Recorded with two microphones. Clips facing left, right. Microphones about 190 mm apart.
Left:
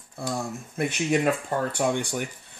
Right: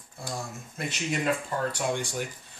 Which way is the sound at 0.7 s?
55° left (ahead or behind).